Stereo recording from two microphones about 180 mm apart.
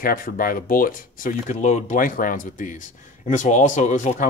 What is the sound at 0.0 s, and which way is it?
Speech, 50° left (ahead or behind).